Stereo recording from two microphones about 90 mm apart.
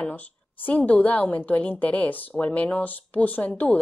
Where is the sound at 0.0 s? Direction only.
20° left (ahead or behind).